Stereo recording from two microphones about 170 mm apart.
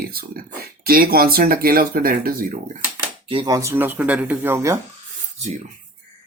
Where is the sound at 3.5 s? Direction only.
15° right (ahead or behind).